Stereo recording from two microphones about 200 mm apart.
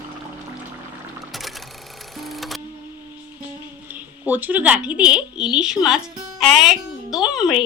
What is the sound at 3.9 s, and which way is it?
A woman's voice, 10° right (ahead or behind).